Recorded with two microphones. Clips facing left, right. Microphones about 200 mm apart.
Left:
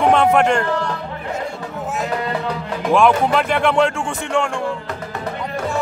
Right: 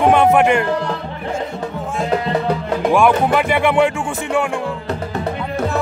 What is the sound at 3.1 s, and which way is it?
Music, 5° right (ahead or behind).